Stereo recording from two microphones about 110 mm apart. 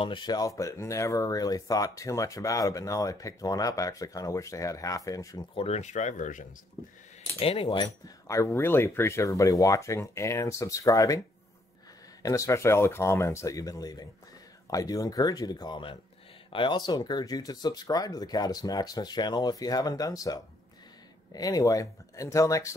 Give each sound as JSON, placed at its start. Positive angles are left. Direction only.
{"t": 0.0, "sound": "speech", "side_deg": 45}
{"t": 5.5, "sound": "speech", "side_deg": 70}
{"t": 7.3, "sound": "speech", "side_deg": 60}
{"t": 8.5, "sound": "speech", "side_deg": 20}
{"t": 12.2, "sound": "speech", "side_deg": 30}